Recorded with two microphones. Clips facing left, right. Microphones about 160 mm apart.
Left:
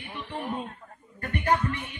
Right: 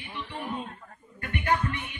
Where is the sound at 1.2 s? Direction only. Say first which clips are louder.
Left 2 dB; 40° left (ahead or behind).